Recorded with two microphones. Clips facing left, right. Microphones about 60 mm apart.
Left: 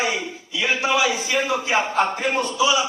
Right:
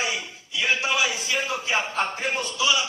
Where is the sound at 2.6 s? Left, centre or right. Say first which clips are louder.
Left 4 dB; left.